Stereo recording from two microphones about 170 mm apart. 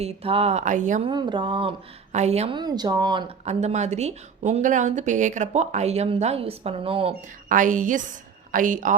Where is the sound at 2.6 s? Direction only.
25° right (ahead or behind).